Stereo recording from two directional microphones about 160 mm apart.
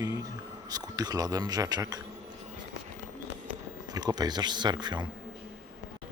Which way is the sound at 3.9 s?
25° right (ahead or behind).